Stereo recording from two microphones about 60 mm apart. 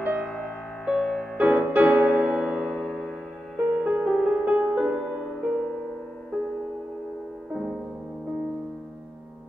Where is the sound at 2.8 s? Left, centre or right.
Centre.